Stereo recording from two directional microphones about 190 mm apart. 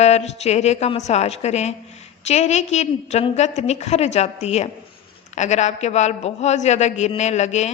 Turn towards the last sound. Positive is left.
turn(degrees=35)  # may be behind; listen again after turning